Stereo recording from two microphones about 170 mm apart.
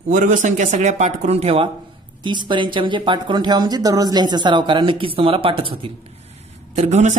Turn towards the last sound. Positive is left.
turn(degrees=-45)  # may be behind; listen again after turning